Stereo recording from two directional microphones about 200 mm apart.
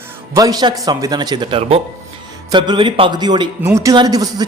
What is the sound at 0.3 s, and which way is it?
A man's voice, 20° right (ahead or behind).